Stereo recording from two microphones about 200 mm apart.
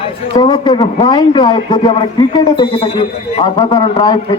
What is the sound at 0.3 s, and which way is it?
A man's voice, 20° left (ahead or behind).